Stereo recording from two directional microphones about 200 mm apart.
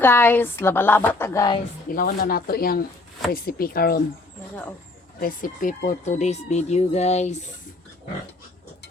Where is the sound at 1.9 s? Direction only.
45° left (ahead or behind).